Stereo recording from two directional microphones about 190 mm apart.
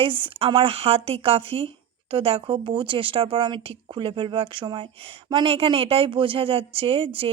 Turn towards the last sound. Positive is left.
turn(degrees=-30)  # may be behind; listen again after turning